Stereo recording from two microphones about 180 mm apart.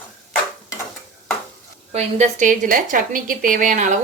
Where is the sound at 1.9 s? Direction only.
35° right (ahead or behind).